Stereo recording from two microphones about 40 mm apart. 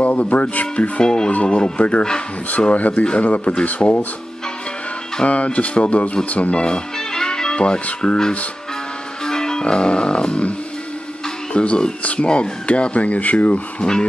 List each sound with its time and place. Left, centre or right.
0.0 s speech: left
1.0 s speech: centre
1.3 s speech: left
5.2 s speech: left
6.5 s speech: left
7.2 s music: centre
8.0 s speech: left
9.2 s music: centre
11.5 s speech: left
13.7 s speech: centre